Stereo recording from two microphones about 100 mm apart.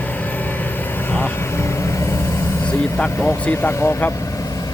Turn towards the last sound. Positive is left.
turn(degrees=20)  # may be behind; listen again after turning